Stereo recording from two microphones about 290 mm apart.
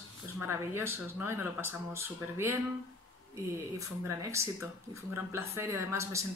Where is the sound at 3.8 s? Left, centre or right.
Centre.